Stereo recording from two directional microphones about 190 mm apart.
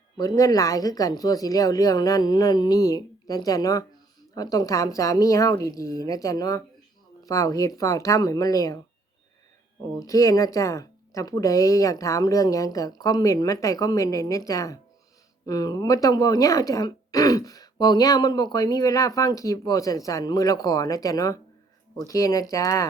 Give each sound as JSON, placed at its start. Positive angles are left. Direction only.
{"t": 0.2, "sound": "speech", "side_deg": 15}
{"t": 10.0, "sound": "speech", "side_deg": 15}